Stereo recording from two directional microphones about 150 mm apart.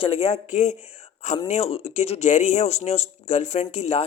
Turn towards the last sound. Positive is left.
turn(degrees=45)  # may be behind; listen again after turning